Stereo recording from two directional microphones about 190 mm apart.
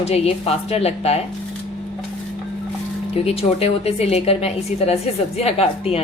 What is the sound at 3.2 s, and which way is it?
A woman's voice, 35° left (ahead or behind).